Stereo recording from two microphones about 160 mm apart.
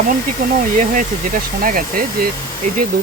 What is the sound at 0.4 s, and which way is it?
Speech, 65° right (ahead or behind).